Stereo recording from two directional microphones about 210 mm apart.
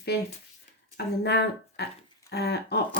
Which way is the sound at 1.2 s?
50° left (ahead or behind).